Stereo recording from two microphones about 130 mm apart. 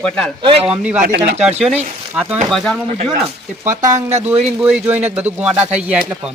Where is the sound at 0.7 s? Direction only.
5° right (ahead or behind).